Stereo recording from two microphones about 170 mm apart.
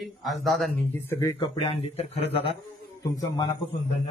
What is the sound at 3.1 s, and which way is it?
Speech, 25° left (ahead or behind).